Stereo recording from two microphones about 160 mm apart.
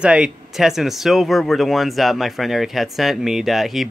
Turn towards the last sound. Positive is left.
turn(degrees=0)  # may be behind; listen again after turning